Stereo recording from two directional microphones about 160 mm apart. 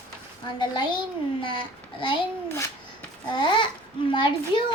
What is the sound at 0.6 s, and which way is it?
Child singing, 30° left (ahead or behind).